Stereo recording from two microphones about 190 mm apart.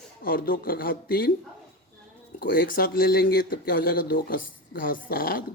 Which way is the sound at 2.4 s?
50° left (ahead or behind).